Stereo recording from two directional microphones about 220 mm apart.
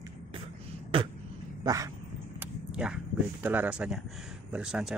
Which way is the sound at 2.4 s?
5° right (ahead or behind).